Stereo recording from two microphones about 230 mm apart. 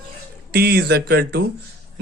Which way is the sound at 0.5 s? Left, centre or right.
Right.